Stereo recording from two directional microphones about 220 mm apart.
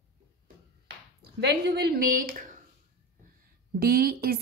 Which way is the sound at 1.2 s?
50° right (ahead or behind).